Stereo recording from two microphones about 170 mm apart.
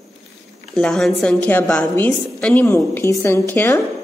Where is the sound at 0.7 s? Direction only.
Centre (ahead or behind).